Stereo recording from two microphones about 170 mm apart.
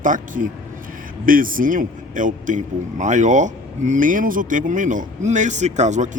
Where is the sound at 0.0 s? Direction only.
50° right (ahead or behind).